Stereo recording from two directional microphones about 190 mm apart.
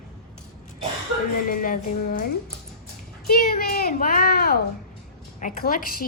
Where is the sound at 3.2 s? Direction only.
55° left (ahead or behind).